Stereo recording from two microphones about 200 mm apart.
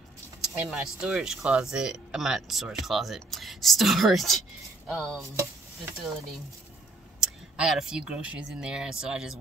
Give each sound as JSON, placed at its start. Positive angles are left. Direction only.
{"t": 0.6, "sound": "speech", "side_deg": -5}
{"t": 7.2, "sound": "speech", "side_deg": -5}